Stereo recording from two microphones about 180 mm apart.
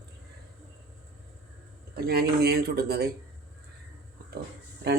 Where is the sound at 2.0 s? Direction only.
60° right (ahead or behind).